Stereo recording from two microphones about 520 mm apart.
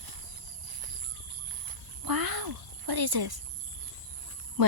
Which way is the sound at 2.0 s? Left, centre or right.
Right.